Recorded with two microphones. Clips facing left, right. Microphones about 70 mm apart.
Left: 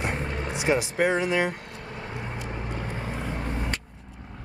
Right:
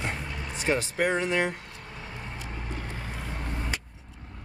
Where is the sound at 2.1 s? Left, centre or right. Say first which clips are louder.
Left 5 dB; centre.